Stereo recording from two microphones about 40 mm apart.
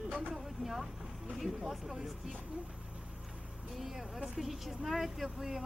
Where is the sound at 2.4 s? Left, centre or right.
Right.